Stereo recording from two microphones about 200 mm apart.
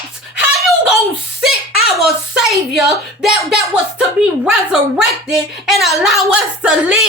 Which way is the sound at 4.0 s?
5° right (ahead or behind).